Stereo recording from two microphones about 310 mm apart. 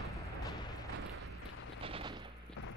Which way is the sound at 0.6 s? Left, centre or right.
Centre.